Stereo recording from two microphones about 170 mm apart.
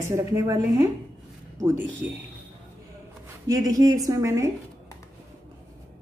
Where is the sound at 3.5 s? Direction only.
20° right (ahead or behind).